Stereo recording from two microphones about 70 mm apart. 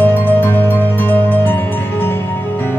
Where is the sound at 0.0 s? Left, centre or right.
Left.